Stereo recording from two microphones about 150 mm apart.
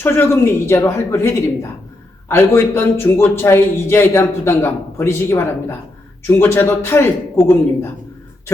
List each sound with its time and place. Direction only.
0.0 s a man's voice: 15° left (ahead or behind)
2.3 s a man's voice: 15° left (ahead or behind)